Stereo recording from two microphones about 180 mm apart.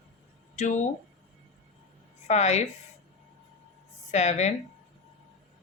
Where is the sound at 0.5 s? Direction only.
40° left (ahead or behind).